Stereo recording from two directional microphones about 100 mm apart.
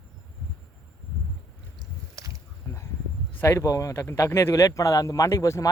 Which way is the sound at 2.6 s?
25° left (ahead or behind).